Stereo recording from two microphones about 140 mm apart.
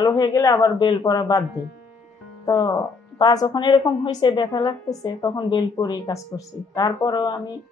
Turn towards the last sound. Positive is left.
turn(degrees=30)  # may be behind; listen again after turning